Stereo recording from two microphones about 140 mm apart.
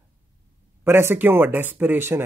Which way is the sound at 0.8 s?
15° right (ahead or behind).